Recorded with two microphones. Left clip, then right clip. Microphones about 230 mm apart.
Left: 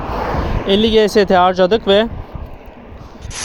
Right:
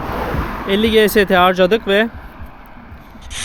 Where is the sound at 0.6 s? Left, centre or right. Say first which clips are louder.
Left 1 dB; centre.